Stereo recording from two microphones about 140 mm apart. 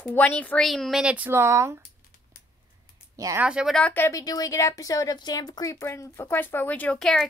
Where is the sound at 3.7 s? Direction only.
10° left (ahead or behind).